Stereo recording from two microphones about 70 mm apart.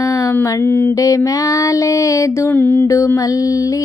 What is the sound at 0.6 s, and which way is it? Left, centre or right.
Mantra, left.